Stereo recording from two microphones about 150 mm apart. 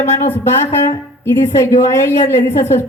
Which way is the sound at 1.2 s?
15° left (ahead or behind).